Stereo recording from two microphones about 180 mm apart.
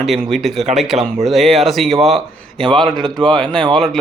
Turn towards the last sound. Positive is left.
turn(degrees=0)  # may be behind; listen again after turning